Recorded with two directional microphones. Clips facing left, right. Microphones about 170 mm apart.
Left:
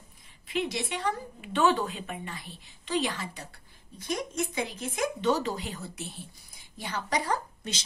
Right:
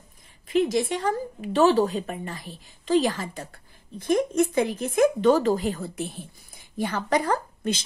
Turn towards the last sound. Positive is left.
turn(degrees=-55)  # may be behind; listen again after turning